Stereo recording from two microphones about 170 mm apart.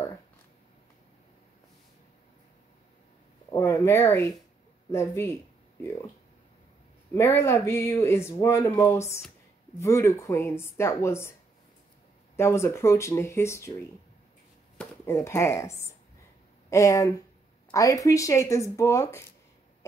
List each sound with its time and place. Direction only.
3.5 s speech: 15° left (ahead or behind)
7.2 s speech: 15° left (ahead or behind)
12.4 s speech: 15° left (ahead or behind)
14.8 s speech: 15° left (ahead or behind)